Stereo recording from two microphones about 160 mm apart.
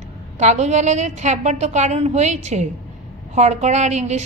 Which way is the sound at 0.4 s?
45° right (ahead or behind).